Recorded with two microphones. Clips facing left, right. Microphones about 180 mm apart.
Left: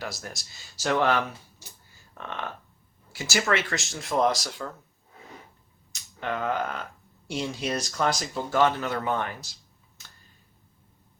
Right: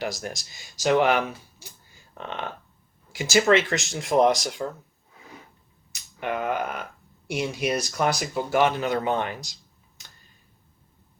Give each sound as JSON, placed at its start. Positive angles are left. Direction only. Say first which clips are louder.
{"t": 0.5, "sound": "speech", "louder": "right 5 dB", "side_deg": -15}
{"t": 5.9, "sound": "speech", "louder": "right 2 dB", "side_deg": -15}